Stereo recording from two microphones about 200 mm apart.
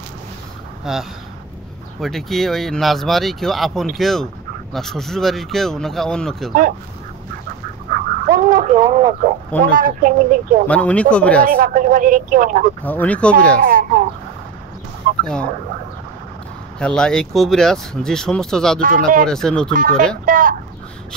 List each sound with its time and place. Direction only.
0.9 s speech: centre (ahead or behind)
7.9 s dog: 45° right (ahead or behind)
9.7 s speech: 45° right (ahead or behind)
10.7 s speech: 5° left (ahead or behind)
11.4 s speech: 45° right (ahead or behind)
12.8 s speech: 10° left (ahead or behind)
13.6 s speech: 45° right (ahead or behind)
15.0 s fowl: 50° right (ahead or behind)
16.8 s speech: 5° left (ahead or behind)
18.8 s speech: 45° right (ahead or behind)
19.2 s speech: 5° left (ahead or behind)
19.7 s speech: 45° right (ahead or behind)
20.2 s a sound: 45° right (ahead or behind)